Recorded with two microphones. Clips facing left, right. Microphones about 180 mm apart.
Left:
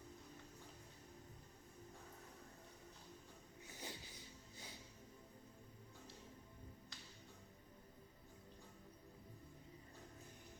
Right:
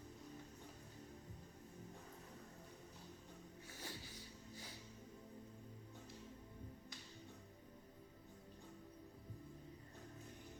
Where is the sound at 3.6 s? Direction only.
20° left (ahead or behind).